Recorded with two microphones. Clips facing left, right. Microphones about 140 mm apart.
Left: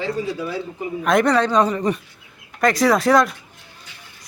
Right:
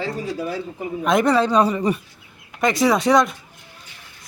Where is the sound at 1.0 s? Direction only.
Centre (ahead or behind).